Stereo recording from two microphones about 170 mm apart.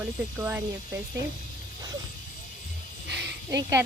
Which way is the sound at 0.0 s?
10° right (ahead or behind).